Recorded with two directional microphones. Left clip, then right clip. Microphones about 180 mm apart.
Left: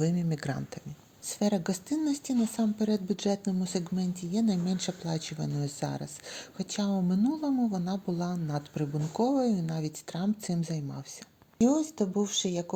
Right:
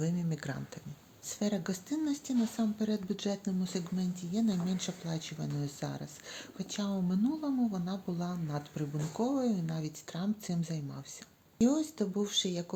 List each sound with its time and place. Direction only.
0.0 s speech: 30° left (ahead or behind)